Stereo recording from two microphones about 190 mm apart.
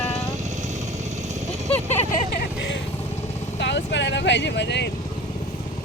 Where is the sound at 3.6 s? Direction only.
70° left (ahead or behind).